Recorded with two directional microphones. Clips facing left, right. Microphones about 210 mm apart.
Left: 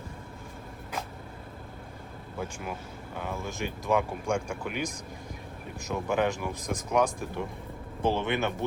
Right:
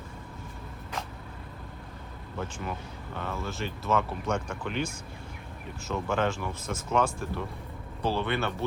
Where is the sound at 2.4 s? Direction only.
10° left (ahead or behind).